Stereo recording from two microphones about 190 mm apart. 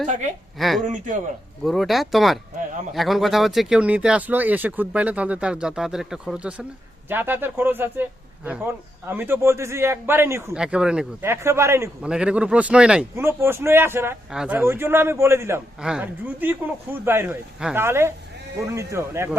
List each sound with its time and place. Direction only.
0.0 s a woman's voice: 40° right (ahead or behind)
0.6 s speech: centre (ahead or behind)
0.9 s a man's voice: 45° right (ahead or behind)
1.6 s a man's voice: centre (ahead or behind)
9.0 s a man's voice: 10° right (ahead or behind)